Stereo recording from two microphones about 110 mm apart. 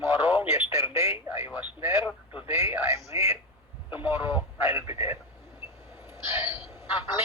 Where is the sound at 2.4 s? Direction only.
25° right (ahead or behind).